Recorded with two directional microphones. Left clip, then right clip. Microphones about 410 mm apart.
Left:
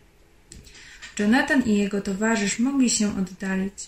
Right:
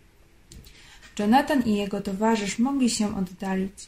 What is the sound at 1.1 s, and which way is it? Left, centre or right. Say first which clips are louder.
Speech: even; right.